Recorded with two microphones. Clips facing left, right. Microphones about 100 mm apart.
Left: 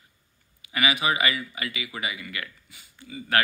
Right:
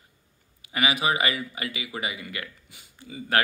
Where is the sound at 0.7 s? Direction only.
40° right (ahead or behind).